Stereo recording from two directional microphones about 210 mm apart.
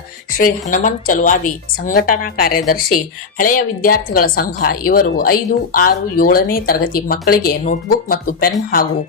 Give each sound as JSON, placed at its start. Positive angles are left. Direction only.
{"t": 0.3, "sound": "a woman's voice", "side_deg": 40}